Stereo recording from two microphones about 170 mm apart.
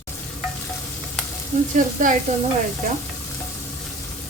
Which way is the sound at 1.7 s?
50° right (ahead or behind).